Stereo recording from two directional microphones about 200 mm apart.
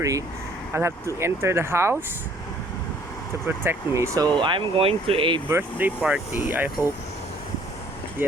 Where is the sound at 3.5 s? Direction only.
15° right (ahead or behind).